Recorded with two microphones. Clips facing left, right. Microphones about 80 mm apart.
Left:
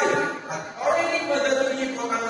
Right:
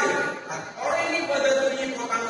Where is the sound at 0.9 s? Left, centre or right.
Left.